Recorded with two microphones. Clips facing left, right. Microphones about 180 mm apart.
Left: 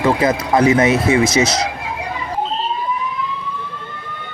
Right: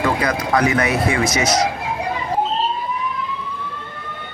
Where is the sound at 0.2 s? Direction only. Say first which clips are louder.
Left 4 dB; 20° left (ahead or behind).